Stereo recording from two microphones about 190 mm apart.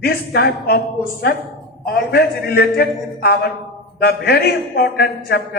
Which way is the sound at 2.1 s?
50° left (ahead or behind).